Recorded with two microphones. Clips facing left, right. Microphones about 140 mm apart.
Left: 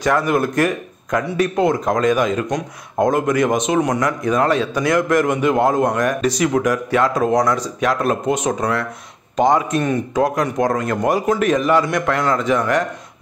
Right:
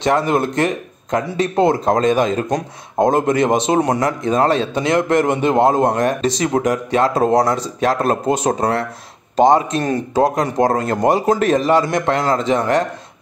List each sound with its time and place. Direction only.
0.0 s speech: 25° right (ahead or behind)